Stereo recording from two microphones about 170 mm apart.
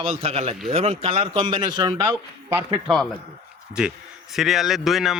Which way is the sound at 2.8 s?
Centre (ahead or behind).